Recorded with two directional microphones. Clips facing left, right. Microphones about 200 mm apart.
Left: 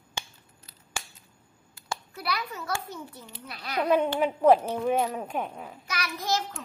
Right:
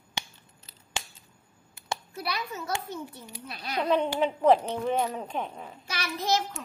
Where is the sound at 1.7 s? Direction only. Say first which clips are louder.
Right 2 dB; 20° right (ahead or behind).